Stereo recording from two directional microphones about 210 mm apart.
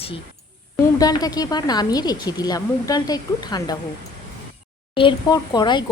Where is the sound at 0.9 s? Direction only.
15° left (ahead or behind).